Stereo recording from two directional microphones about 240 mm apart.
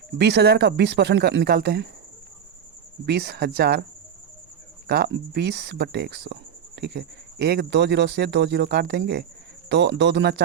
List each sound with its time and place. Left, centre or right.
0.2 s speech: right
3.1 s speech: right
4.9 s speech: right